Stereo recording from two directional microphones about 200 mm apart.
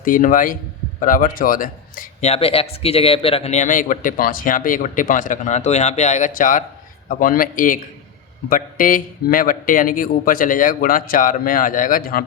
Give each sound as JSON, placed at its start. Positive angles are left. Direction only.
{"t": 0.0, "sound": "a man's voice", "side_deg": 40}